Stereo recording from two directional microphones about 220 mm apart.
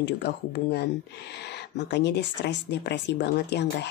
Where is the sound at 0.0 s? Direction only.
50° left (ahead or behind).